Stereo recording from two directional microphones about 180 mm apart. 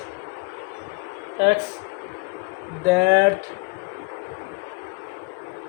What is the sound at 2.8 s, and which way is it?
Speech, 70° right (ahead or behind).